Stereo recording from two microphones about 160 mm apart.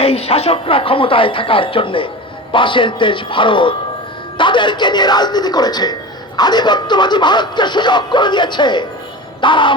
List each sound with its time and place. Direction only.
0.0 s speech: 40° left (ahead or behind)